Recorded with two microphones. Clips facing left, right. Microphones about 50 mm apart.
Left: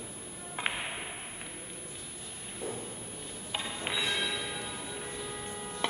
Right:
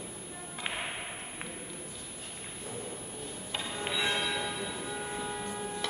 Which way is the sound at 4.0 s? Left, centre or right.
Centre.